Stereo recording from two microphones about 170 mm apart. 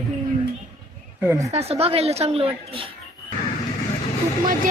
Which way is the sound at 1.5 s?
35° right (ahead or behind).